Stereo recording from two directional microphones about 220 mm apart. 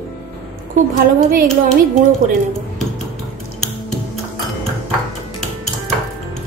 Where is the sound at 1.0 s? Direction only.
40° right (ahead or behind).